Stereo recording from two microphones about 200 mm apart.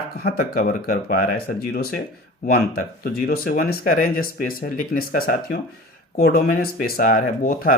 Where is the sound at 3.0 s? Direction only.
50° left (ahead or behind).